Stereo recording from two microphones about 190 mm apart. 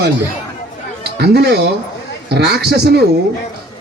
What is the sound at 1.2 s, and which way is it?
A man's voice, 60° right (ahead or behind).